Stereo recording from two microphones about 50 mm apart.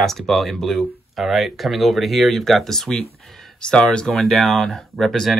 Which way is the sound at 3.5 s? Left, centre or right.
Centre.